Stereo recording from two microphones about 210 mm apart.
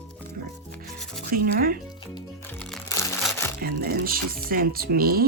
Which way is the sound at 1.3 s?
45° right (ahead or behind).